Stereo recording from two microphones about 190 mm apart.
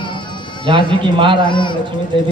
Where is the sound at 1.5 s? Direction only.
25° left (ahead or behind).